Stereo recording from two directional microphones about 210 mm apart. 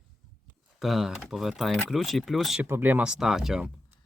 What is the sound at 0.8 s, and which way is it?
Speech, centre (ahead or behind).